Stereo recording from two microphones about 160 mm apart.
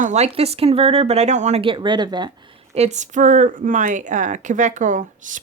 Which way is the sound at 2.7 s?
45° right (ahead or behind).